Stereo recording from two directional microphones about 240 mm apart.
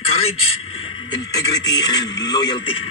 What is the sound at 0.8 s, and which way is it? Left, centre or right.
Speech, centre.